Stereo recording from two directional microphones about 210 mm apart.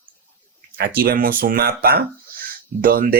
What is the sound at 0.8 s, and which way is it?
Speech, 45° right (ahead or behind).